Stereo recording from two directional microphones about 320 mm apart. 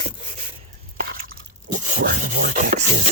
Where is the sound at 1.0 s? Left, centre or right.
Right.